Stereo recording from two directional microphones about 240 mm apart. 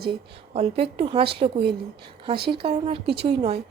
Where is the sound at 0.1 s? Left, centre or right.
Right.